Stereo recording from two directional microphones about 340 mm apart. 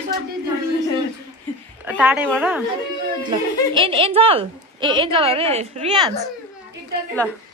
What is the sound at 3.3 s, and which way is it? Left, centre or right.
A woman's voice, centre.